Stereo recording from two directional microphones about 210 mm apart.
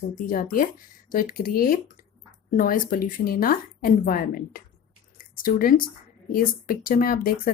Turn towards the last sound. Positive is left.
turn(degrees=45)  # may be behind; listen again after turning